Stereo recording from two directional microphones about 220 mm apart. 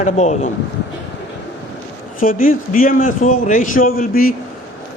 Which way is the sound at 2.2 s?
40° left (ahead or behind).